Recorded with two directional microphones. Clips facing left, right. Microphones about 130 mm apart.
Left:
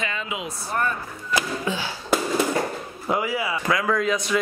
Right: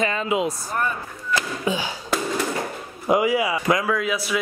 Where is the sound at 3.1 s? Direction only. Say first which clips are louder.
Right 5 dB; 15° right (ahead or behind).